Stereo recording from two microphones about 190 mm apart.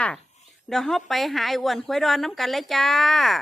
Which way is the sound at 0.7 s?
Centre (ahead or behind).